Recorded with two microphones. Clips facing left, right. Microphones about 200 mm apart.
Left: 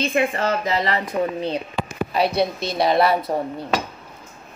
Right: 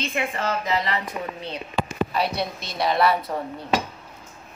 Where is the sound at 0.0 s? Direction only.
40° left (ahead or behind).